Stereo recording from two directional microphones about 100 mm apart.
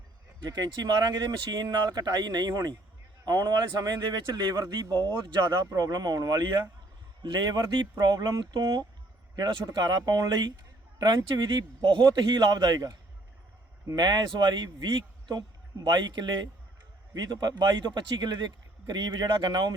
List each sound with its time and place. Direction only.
0.4 s speech: 45° right (ahead or behind)
5.0 s speech: 50° right (ahead or behind)